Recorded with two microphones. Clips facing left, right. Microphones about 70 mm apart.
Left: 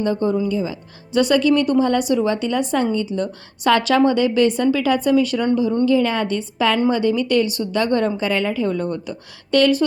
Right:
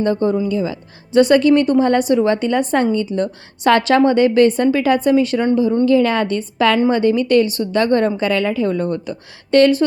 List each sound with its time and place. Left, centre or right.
0.0 s a woman's voice: right
1.1 s a woman's voice: right
5.8 s a woman's voice: right